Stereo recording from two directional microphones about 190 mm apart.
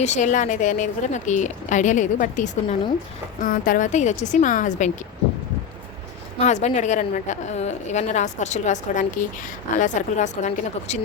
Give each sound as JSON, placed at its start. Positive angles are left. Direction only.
{"t": 0.0, "sound": "a woman's voice", "side_deg": 40}
{"t": 6.4, "sound": "a woman's voice", "side_deg": 35}